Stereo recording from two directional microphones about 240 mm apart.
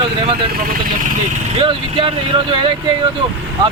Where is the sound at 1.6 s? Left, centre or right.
Right.